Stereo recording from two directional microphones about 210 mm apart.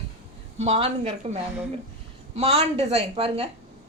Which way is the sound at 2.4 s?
30° right (ahead or behind).